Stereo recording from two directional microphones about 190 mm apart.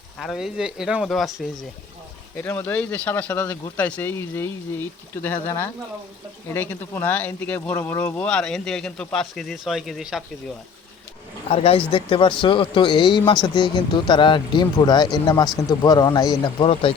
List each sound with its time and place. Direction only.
0.2 s speech: centre (ahead or behind)
2.3 s speech: 10° left (ahead or behind)
11.4 s speech: 30° left (ahead or behind)